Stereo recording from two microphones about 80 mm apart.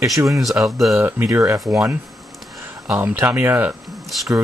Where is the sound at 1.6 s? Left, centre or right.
Centre.